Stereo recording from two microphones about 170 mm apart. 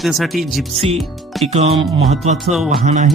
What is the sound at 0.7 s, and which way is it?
Speech, 35° right (ahead or behind).